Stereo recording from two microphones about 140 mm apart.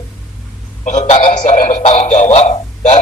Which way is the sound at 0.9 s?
60° left (ahead or behind).